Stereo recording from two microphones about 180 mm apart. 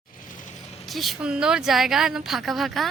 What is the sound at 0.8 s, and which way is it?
Speech, centre (ahead or behind).